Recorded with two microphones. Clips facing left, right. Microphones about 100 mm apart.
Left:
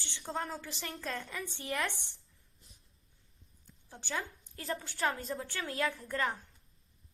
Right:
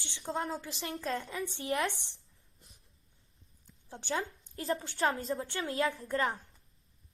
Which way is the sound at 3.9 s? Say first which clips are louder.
Right 4 dB; 30° right (ahead or behind).